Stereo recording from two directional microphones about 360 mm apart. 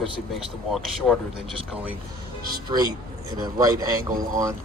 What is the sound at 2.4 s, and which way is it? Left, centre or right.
Music, right.